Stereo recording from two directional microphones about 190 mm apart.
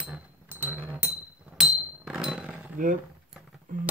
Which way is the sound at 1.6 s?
5° right (ahead or behind).